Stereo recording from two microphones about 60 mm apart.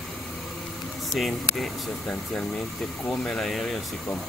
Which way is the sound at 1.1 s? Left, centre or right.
Centre.